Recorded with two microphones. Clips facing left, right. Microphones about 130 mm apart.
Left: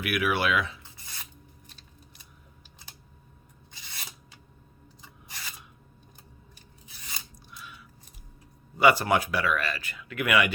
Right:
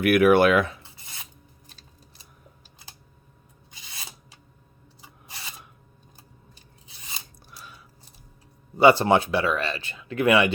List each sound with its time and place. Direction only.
0.0 s speech: 50° right (ahead or behind)
1.0 s filing: 20° right (ahead or behind)
5.3 s filing: 25° right (ahead or behind)
6.8 s scissors: 25° right (ahead or behind)
7.5 s chewing: 35° right (ahead or behind)
8.8 s speech: 30° right (ahead or behind)